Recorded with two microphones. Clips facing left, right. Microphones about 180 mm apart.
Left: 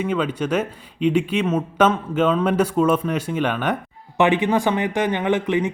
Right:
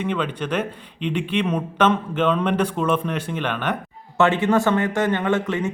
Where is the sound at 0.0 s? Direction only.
5° left (ahead or behind).